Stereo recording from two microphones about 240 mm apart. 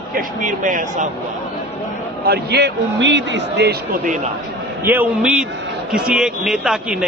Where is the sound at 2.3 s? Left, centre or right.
Right.